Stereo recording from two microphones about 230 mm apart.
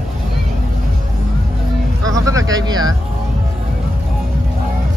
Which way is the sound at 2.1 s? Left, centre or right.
Centre.